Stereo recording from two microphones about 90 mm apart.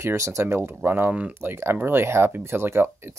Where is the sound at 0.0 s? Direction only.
35° right (ahead or behind).